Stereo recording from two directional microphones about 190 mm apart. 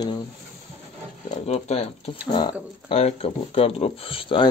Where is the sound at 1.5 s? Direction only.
35° left (ahead or behind).